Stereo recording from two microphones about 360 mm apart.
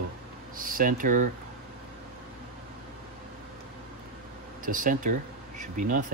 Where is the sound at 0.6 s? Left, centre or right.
Right.